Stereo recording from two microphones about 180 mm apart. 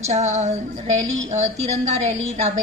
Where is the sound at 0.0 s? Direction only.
40° right (ahead or behind).